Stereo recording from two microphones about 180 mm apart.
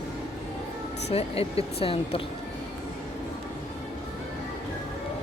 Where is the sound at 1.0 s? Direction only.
35° left (ahead or behind).